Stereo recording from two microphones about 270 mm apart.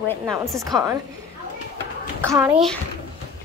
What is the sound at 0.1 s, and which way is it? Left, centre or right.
Speech, centre.